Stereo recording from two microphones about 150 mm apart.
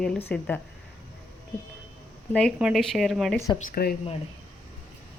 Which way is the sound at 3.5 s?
70° left (ahead or behind).